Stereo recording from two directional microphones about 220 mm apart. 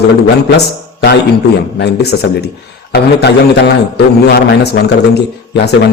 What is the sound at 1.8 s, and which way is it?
A man's voice, 50° left (ahead or behind).